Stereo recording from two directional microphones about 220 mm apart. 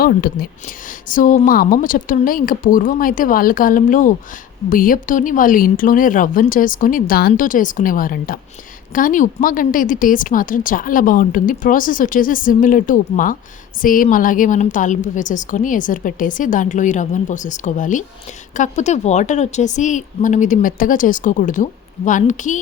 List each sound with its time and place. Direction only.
0.0 s speech: 40° left (ahead or behind)